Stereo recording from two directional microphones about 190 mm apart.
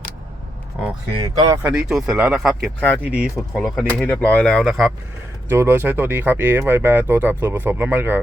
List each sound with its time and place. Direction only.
0.8 s speech: centre (ahead or behind)
1.1 s speech: 20° right (ahead or behind)
1.7 s speech: 5° right (ahead or behind)
4.0 s speech: 10° left (ahead or behind)
5.5 s speech: 10° right (ahead or behind)